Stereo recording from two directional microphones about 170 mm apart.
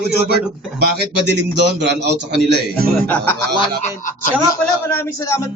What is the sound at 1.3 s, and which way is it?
A man's voice, 85° right.